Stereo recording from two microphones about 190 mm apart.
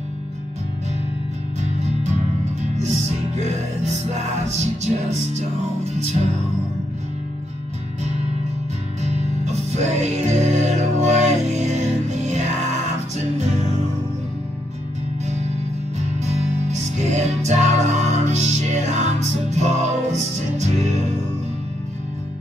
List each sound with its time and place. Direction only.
1.6 s music: 35° right (ahead or behind)
9.0 s music: 35° right (ahead or behind)
16.3 s music: 35° right (ahead or behind)